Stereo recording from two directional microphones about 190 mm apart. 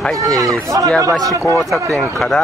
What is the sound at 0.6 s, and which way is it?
Speech, 15° right (ahead or behind).